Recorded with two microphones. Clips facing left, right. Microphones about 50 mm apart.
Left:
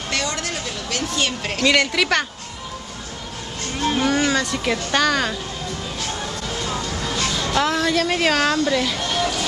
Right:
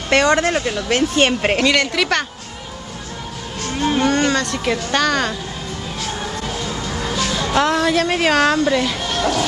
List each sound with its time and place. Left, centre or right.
0.1 s speech: right
1.7 s speech: centre
4.0 s speech: centre
6.9 s music: centre
7.2 s speech: centre